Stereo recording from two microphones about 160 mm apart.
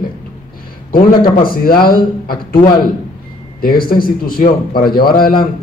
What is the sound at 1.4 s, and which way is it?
Speech, 65° left (ahead or behind).